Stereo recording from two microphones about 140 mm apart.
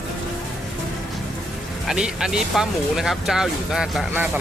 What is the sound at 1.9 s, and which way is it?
Speech, 5° right (ahead or behind).